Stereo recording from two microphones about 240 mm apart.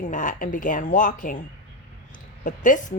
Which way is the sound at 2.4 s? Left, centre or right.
Left.